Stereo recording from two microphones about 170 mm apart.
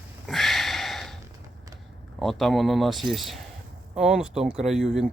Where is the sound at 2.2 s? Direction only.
Centre (ahead or behind).